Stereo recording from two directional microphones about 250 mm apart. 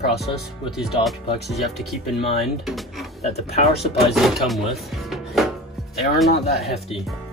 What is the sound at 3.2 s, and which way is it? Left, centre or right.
Speech, left.